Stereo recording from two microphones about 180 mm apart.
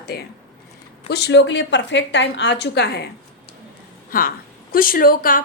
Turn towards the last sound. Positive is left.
turn(degrees=50)  # may be behind; listen again after turning